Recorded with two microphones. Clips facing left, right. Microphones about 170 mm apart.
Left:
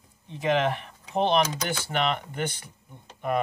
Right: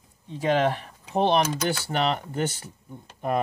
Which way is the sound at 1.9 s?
40° right (ahead or behind).